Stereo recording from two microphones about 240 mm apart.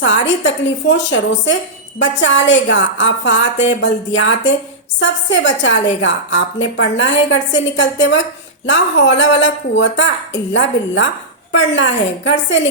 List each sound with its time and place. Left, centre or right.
0.0 s a woman's voice: left